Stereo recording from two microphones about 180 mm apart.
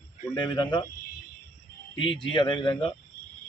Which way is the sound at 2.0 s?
30° left (ahead or behind).